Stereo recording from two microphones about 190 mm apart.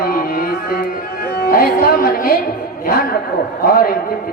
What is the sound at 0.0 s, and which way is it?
Music, 50° left (ahead or behind).